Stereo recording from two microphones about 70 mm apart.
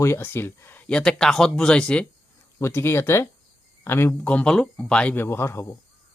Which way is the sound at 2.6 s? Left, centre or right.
Left.